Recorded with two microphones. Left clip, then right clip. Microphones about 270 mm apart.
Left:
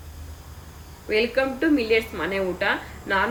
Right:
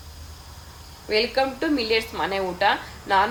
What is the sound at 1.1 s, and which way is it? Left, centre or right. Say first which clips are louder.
A woman's voice: even; centre.